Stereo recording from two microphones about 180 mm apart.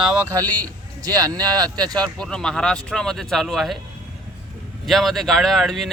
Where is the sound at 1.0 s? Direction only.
20° right (ahead or behind).